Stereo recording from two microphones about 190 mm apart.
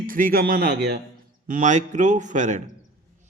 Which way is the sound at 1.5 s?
40° right (ahead or behind).